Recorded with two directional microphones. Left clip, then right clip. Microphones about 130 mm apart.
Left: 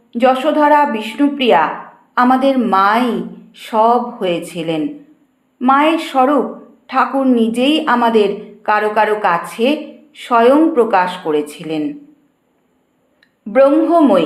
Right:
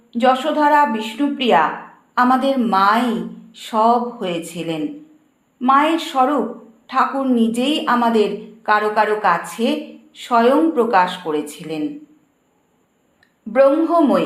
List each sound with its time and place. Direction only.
0.1 s a woman's voice: 20° left (ahead or behind)
13.5 s a woman's voice: 15° left (ahead or behind)